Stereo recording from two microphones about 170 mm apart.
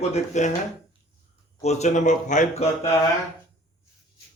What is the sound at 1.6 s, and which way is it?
A man's voice, 40° left (ahead or behind).